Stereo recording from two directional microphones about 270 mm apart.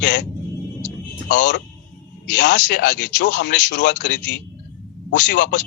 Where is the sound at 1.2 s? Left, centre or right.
Left.